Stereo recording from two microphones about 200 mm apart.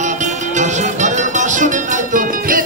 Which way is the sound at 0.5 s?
35° right (ahead or behind).